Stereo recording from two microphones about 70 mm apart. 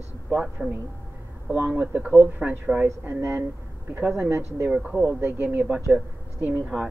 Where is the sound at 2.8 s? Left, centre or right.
Right.